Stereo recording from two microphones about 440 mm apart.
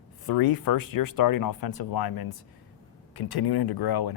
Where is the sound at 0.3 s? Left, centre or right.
Left.